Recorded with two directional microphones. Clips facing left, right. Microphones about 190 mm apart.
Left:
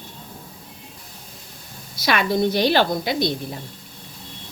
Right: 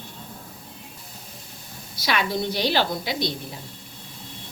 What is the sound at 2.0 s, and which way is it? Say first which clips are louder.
A woman's voice: left 5 dB; 55° left (ahead or behind).